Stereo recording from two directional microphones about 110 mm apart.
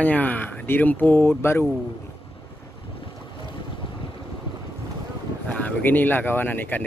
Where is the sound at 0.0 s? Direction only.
15° left (ahead or behind).